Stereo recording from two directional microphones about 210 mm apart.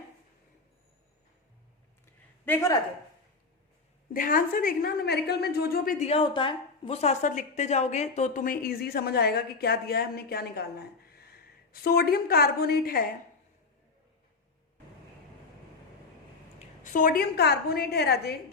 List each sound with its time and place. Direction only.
2.4 s a man's voice: 10° left (ahead or behind)
4.1 s a woman's voice: 40° left (ahead or behind)
16.8 s a woman's voice: 40° left (ahead or behind)